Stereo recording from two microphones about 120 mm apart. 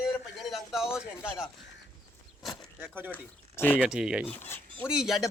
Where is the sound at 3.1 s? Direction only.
15° left (ahead or behind).